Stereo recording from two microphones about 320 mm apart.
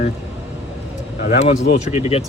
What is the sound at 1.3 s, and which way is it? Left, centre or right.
Speech, left.